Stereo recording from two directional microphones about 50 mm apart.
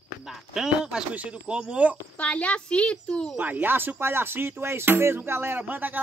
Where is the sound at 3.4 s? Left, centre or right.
Right.